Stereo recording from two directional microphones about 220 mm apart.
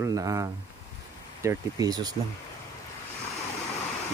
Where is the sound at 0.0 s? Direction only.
15° right (ahead or behind).